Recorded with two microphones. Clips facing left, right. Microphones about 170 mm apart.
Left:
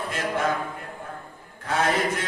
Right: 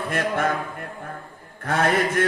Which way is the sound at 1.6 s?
55° right (ahead or behind).